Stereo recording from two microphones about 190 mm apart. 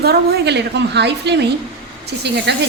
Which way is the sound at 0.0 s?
60° right (ahead or behind).